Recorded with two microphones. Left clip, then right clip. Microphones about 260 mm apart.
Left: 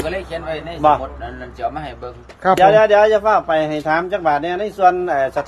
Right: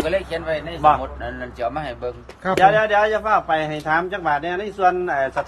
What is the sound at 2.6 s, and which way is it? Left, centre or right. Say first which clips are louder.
A man's voice: left 4 dB; left.